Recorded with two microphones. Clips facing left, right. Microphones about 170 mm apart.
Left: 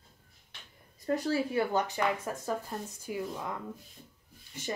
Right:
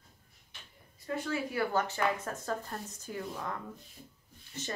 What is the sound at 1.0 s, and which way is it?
Speech, 40° left (ahead or behind).